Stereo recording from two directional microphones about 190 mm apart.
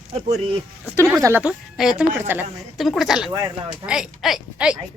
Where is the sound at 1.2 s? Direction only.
10° right (ahead or behind).